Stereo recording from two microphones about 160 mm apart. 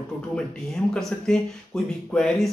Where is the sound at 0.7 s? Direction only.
5° left (ahead or behind).